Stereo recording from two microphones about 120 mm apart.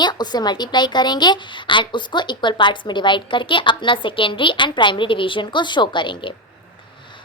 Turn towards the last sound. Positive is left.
turn(degrees=40)  # may be behind; listen again after turning